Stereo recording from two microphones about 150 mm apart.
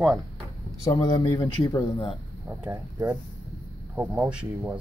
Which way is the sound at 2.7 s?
15° right (ahead or behind).